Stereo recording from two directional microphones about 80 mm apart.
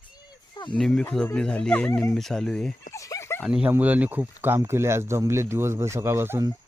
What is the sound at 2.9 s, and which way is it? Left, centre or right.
Dog, left.